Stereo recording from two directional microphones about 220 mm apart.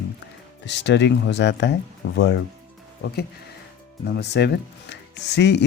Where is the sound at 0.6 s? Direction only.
55° left (ahead or behind).